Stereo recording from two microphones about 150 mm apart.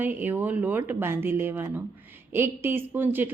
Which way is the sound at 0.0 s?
15° right (ahead or behind).